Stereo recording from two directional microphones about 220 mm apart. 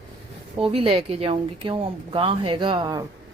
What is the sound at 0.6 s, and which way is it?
Speech, 25° right (ahead or behind).